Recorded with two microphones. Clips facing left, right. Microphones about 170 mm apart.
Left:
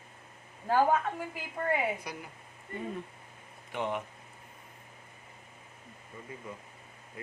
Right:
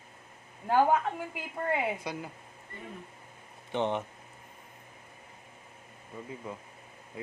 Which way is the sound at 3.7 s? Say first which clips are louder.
Right 4 dB; 25° right (ahead or behind).